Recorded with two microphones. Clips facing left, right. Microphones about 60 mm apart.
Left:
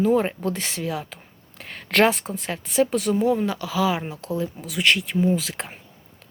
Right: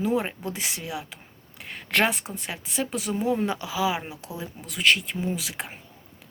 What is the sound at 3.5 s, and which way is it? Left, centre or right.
Speech, right.